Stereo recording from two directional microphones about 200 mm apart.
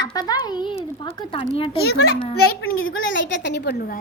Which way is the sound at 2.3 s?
50° left (ahead or behind).